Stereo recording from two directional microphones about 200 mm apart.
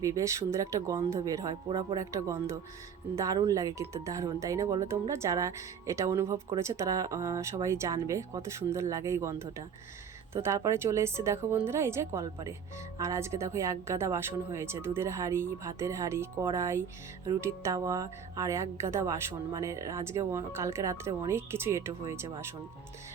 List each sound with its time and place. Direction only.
0.0 s speech: 15° right (ahead or behind)